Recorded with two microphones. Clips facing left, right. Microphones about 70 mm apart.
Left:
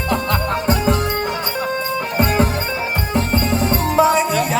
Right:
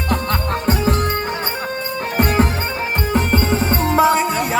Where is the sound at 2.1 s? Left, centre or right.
Right.